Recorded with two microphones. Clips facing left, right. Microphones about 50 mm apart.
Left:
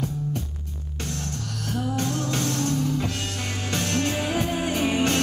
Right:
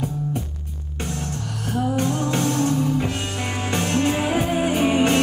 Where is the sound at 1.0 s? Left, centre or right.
Centre.